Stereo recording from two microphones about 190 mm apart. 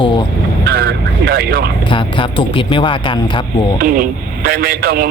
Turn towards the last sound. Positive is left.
turn(degrees=-50)  # may be behind; listen again after turning